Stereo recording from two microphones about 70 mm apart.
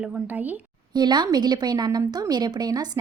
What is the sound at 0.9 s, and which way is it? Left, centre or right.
A woman's voice, right.